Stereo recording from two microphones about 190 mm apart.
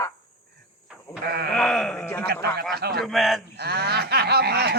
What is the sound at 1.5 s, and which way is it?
Wail, 5° left (ahead or behind).